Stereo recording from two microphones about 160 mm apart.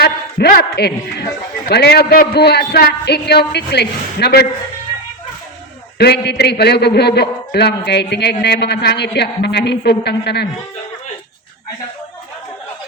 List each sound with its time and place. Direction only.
0.0 s a man's voice: 70° left (ahead or behind)
6.0 s a woman's voice: 90° left